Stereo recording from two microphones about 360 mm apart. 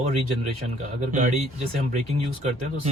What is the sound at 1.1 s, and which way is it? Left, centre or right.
Speech, centre.